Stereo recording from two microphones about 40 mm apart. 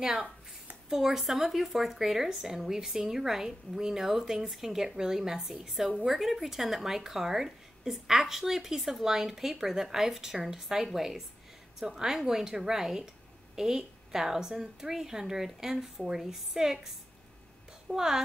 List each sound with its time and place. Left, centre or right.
0.0 s a woman's voice: centre